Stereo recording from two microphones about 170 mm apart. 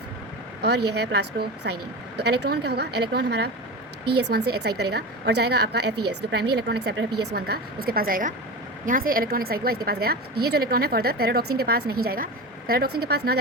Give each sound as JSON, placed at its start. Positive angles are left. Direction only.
{"t": 0.6, "sound": "a woman's voice", "side_deg": -75}